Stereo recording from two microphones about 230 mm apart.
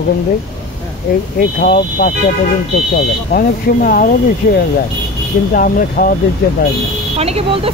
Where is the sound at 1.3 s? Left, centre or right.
Left.